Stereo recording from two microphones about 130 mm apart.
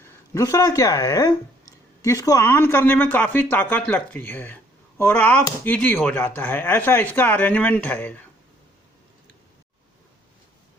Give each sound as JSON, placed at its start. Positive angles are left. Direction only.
{"t": 0.0, "sound": "speech", "side_deg": 25}